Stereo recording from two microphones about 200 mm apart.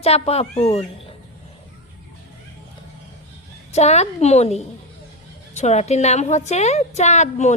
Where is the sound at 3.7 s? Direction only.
35° left (ahead or behind).